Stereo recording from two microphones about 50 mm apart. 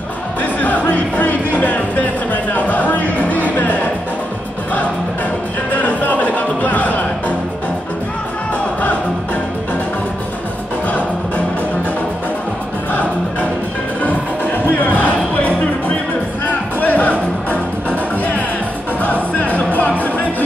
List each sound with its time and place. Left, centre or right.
0.4 s music: left
5.7 s music: left
10.9 s music: left
12.9 s music: left